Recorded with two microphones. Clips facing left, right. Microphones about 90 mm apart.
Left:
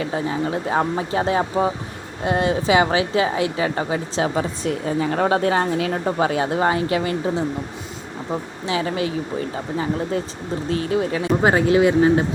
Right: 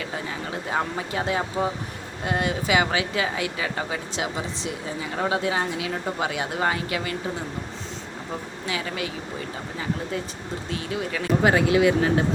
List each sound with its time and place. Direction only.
0.0 s a woman's voice: 30° left (ahead or behind)
6.1 s a woman's voice: 35° left (ahead or behind)
8.3 s speech: 30° left (ahead or behind)
10.7 s a woman's voice: 35° left (ahead or behind)